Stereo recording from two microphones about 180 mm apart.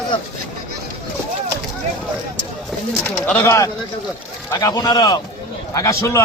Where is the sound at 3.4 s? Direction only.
20° left (ahead or behind).